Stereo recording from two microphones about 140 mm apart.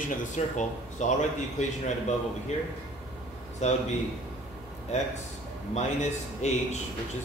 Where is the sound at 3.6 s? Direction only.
55° left (ahead or behind).